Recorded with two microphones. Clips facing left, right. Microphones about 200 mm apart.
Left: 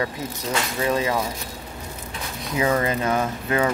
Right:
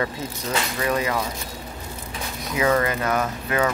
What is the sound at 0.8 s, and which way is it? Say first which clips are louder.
Speech: left 2 dB; 25° left (ahead or behind).